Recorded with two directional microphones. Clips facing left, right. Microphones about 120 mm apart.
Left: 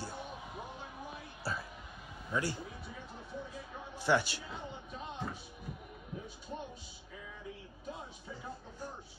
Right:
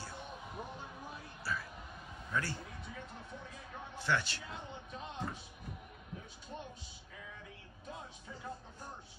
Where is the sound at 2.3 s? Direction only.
10° left (ahead or behind).